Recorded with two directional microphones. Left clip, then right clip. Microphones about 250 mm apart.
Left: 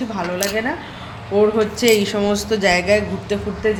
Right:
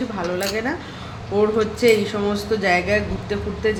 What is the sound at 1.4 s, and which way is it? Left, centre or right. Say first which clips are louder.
Speech: left 2 dB; left.